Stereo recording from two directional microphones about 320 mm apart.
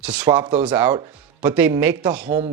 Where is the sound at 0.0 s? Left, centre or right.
Centre.